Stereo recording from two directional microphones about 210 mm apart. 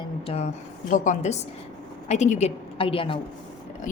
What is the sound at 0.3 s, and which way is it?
A woman's voice, 30° left (ahead or behind).